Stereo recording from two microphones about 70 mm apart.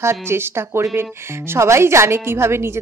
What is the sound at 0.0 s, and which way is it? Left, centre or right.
A woman's voice, right.